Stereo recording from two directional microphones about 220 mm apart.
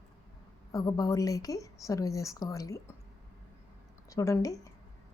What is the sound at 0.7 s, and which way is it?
Speech, 15° left (ahead or behind).